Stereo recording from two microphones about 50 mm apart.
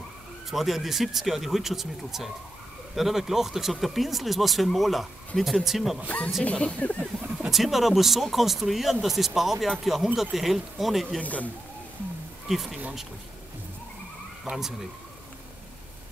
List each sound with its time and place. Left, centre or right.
0.5 s speech: centre
6.0 s speech: left
6.4 s speech: centre
7.4 s speech: centre
11.1 s speech: left
12.4 s speech: centre
14.4 s speech: centre